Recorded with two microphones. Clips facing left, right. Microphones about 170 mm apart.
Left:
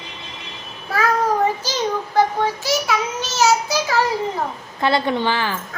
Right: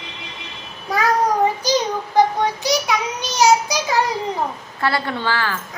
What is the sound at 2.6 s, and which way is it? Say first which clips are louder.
Child singing: right 1 dB; 15° right (ahead or behind).